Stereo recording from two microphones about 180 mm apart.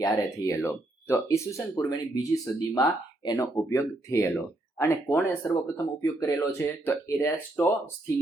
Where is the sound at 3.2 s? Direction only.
20° left (ahead or behind).